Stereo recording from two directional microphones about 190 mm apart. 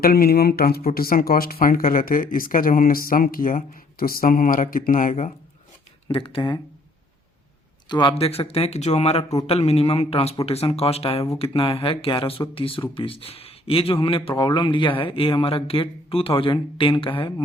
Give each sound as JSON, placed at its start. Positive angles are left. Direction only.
{"t": 0.0, "sound": "speech", "side_deg": 55}
{"t": 6.1, "sound": "speech", "side_deg": 25}
{"t": 7.9, "sound": "speech", "side_deg": 25}